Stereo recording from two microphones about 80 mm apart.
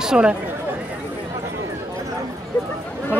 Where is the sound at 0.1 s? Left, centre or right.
Centre.